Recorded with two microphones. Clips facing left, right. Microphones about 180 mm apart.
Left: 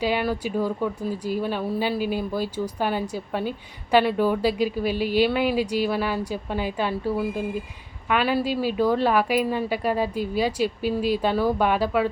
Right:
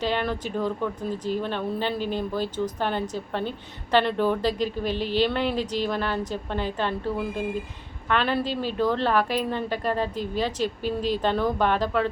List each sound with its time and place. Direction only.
0.0 s speech: 10° left (ahead or behind)